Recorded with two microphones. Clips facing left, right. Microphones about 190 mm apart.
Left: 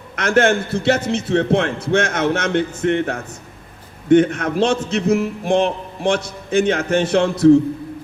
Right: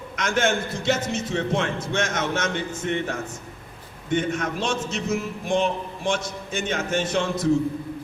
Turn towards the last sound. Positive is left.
turn(degrees=65)  # may be behind; listen again after turning